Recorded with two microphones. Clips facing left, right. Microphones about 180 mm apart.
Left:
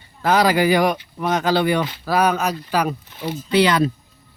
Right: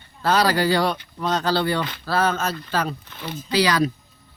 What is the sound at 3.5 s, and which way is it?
Speech, 25° left (ahead or behind).